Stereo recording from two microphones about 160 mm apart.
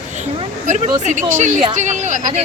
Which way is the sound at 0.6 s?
50° right (ahead or behind).